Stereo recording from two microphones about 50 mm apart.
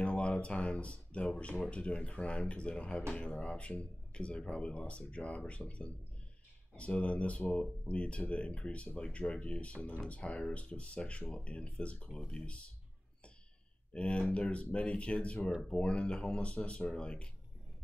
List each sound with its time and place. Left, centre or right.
0.0 s a sound: left
1.7 s speech: left
13.9 s speech: left